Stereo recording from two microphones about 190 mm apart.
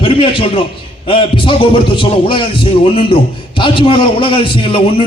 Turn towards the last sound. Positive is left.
turn(degrees=25)  # may be behind; listen again after turning